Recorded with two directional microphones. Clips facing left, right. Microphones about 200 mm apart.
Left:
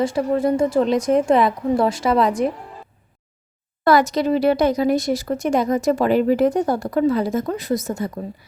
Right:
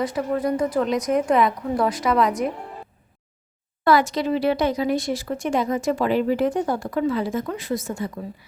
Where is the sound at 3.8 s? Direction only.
40° left (ahead or behind).